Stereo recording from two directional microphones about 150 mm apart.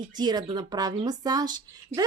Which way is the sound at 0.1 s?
30° right (ahead or behind).